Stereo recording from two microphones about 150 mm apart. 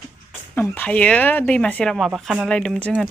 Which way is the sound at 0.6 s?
10° left (ahead or behind).